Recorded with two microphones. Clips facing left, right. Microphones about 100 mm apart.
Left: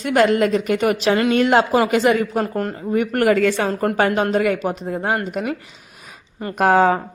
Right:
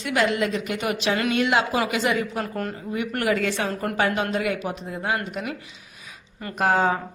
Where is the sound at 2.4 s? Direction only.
35° left (ahead or behind).